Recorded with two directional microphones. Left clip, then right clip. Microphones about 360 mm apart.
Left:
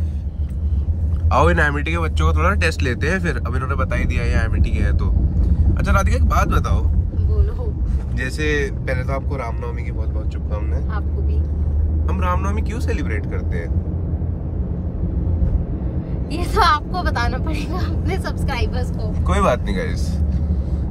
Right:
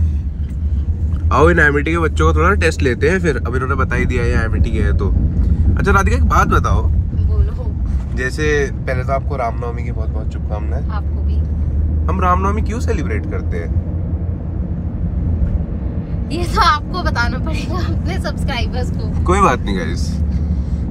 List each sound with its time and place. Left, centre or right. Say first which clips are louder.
1.3 s speech: right 5 dB; centre
2.5 s speech: right 5 dB; right
3.3 s speech: right 5 dB; centre
8.2 s speech: right 5 dB; centre
12.1 s speech: right 8 dB; centre
16.3 s a woman's voice: right 2 dB; centre
19.2 s speech: right 5 dB; centre